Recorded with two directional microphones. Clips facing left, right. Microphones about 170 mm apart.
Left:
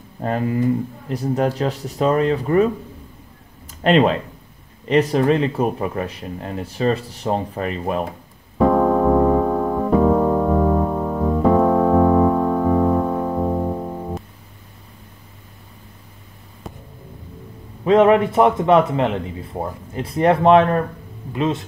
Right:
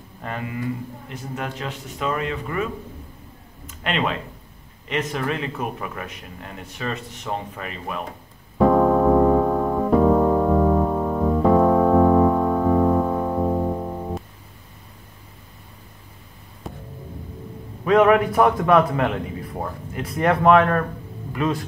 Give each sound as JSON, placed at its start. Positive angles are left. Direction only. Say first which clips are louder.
{"t": 0.2, "sound": "speech", "louder": "left 9 dB", "side_deg": 40}
{"t": 8.5, "sound": "piano", "louder": "left 1 dB", "side_deg": 0}
{"t": 16.6, "sound": "music", "louder": "right 1 dB", "side_deg": 0}
{"t": 17.8, "sound": "a man's voice", "louder": "left 2 dB", "side_deg": 25}